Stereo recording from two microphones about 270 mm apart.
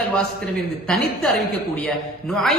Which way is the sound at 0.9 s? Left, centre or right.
Centre.